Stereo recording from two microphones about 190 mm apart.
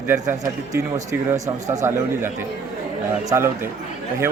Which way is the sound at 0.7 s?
15° right (ahead or behind).